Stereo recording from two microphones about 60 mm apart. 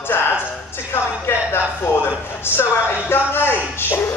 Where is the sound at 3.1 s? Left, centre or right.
Left.